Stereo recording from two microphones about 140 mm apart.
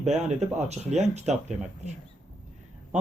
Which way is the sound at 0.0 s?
55° right (ahead or behind).